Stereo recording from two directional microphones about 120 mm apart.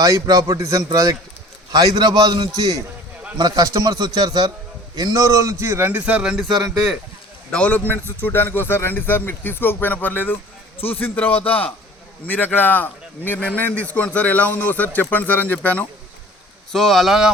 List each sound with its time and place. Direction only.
0.0 s a man's voice: 30° right (ahead or behind); by 6.9 s 5° right (ahead or behind)
7.5 s a man's voice: 10° left (ahead or behind)
10.8 s a man's voice: 55° left (ahead or behind)
11.0 s a man's voice: 15° left (ahead or behind)
16.7 s speech: centre (ahead or behind)